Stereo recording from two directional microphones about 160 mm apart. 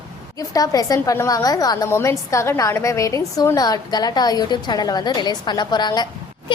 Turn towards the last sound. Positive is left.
turn(degrees=25)  # may be behind; listen again after turning